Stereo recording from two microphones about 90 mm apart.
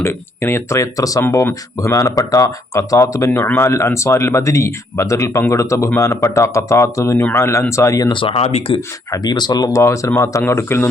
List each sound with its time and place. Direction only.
0.0 s speech: 25° left (ahead or behind)
0.8 s speech: 40° left (ahead or behind)
8.1 s speech: 85° left
9.1 s speech: 50° left (ahead or behind); by 10.8 s 30° left (ahead or behind)